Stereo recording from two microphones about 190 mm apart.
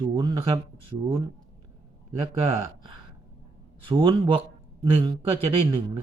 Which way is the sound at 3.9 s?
25° right (ahead or behind).